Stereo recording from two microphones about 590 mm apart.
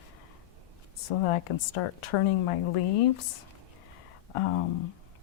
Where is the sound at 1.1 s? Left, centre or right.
Left.